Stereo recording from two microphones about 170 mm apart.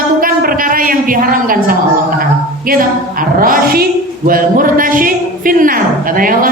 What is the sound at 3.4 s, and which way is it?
A woman's voice, 55° right (ahead or behind).